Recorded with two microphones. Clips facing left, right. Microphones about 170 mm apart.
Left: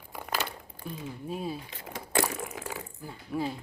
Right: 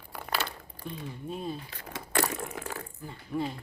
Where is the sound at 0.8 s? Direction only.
5° left (ahead or behind).